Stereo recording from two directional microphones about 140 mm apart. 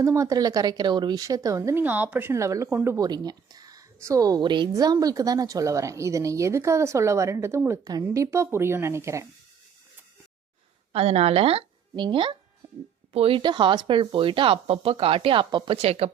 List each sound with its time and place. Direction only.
0.0 s a woman's voice: 25° right (ahead or behind)
10.9 s a woman's voice: 45° right (ahead or behind)